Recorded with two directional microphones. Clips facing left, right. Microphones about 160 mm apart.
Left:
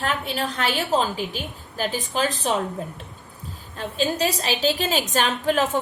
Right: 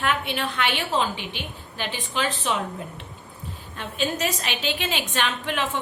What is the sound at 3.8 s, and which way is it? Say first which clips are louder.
A woman's voice: left 3 dB; 35° left (ahead or behind).